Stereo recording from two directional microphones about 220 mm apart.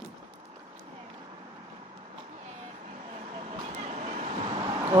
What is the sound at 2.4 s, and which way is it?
Vehicle, 30° right (ahead or behind).